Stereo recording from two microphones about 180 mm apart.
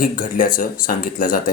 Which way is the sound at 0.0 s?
50° left (ahead or behind).